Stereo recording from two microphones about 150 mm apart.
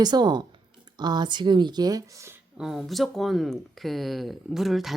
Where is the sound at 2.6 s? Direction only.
Centre (ahead or behind).